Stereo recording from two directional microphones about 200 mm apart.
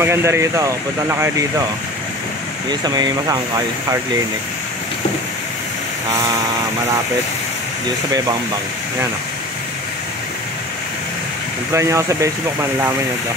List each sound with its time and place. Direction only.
0.0 s speech: 15° right (ahead or behind)
2.7 s speech: 20° right (ahead or behind)
11.7 s speech: 15° right (ahead or behind)